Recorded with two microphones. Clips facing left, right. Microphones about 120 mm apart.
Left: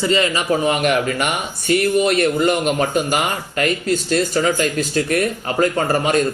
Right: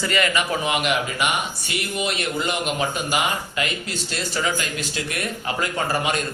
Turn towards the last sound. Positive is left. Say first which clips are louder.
# left 6 dB
turn(degrees=45)  # may be behind; listen again after turning